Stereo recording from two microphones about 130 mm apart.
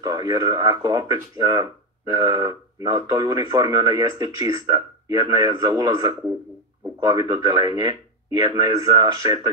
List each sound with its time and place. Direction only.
0.0 s speech: 30° right (ahead or behind)